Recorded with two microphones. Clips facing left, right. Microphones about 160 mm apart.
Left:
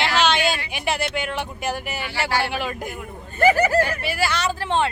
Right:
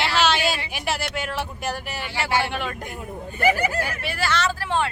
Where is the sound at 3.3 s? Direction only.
40° left (ahead or behind).